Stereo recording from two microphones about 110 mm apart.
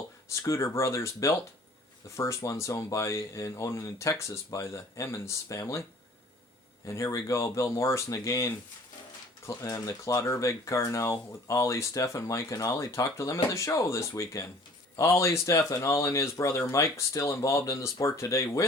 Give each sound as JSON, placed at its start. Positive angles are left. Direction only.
{"t": 0.3, "sound": "speech", "side_deg": 25}
{"t": 6.8, "sound": "speech", "side_deg": 30}